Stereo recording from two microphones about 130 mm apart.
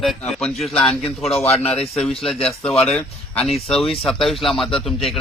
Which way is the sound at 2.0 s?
5° left (ahead or behind).